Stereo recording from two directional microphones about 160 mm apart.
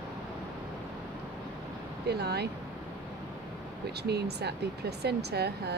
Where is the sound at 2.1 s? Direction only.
90° right.